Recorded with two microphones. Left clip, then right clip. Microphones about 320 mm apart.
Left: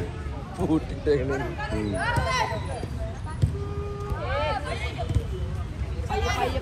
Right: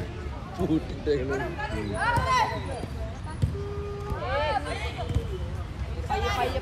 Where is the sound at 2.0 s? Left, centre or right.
Centre.